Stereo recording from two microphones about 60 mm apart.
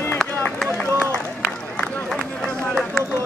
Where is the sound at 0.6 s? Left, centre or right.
Centre.